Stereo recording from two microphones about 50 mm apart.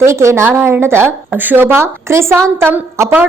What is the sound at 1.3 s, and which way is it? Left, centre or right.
A woman's voice, right.